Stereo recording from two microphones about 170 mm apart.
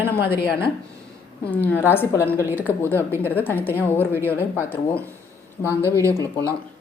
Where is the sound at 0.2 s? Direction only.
70° left (ahead or behind).